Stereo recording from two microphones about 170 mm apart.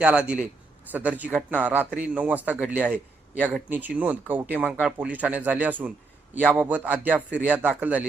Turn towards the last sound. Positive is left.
turn(degrees=-10)  # may be behind; listen again after turning